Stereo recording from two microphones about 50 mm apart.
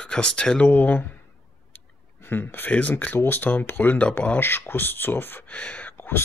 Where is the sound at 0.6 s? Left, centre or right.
Left.